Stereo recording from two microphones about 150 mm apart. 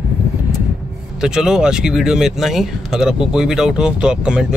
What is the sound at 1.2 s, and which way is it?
Speech, 5° right (ahead or behind).